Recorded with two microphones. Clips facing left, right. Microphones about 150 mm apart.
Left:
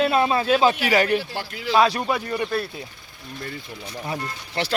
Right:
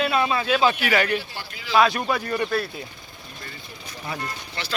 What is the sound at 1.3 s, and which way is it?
Speech, 65° left (ahead or behind).